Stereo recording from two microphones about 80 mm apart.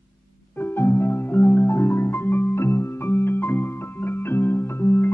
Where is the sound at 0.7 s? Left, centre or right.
Left.